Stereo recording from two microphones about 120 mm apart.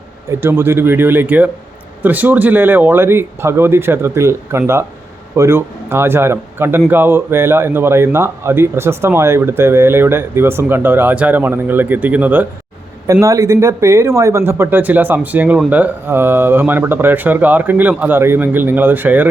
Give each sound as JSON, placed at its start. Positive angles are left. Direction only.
{"t": 0.3, "sound": "speech", "side_deg": -20}
{"t": 13.1, "sound": "speech", "side_deg": -25}